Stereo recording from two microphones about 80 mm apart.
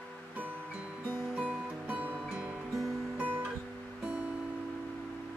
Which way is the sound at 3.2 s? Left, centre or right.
Centre.